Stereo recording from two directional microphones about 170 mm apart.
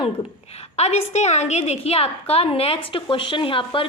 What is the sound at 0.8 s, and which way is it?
A woman's voice, 40° left (ahead or behind).